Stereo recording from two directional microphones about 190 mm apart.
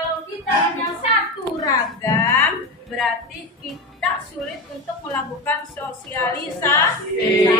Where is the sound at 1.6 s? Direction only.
15° left (ahead or behind).